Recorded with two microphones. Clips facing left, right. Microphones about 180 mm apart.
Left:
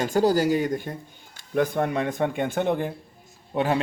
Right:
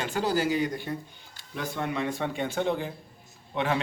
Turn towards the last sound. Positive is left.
turn(degrees=35)  # may be behind; listen again after turning